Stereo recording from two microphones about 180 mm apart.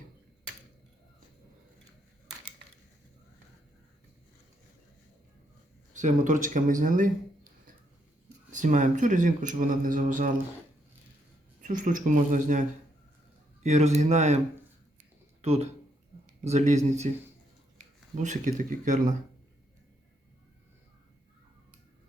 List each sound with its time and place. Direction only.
5.9 s speech: 45° right (ahead or behind)
8.5 s speech: 45° right (ahead or behind)
11.6 s speech: 45° right (ahead or behind)
18.2 s speech: 45° right (ahead or behind)